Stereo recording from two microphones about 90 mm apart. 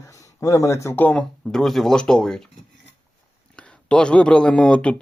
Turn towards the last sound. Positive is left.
turn(degrees=10)  # may be behind; listen again after turning